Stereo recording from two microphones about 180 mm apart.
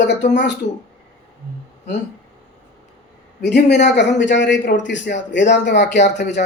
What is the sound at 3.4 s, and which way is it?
A man's voice, 70° left (ahead or behind).